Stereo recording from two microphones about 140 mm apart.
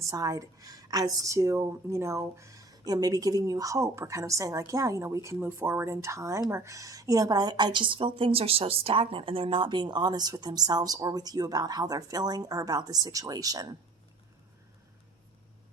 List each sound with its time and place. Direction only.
0.0 s a woman's voice: 25° right (ahead or behind)